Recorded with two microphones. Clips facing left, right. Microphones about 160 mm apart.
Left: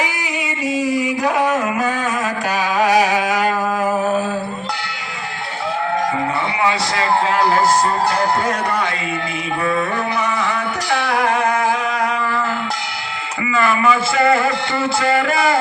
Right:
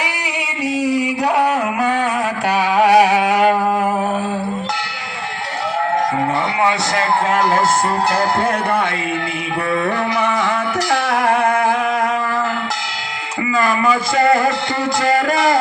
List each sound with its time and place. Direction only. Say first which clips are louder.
0.0 s music: left 1 dB; 70° right (ahead or behind)
0.8 s a sound: right 1 dB; 70° right (ahead or behind)
6.6 s a man's voice: even; 50° right (ahead or behind)
10.2 s music: right 2 dB; 55° right (ahead or behind)
13.5 s a man's voice: even; 35° right (ahead or behind)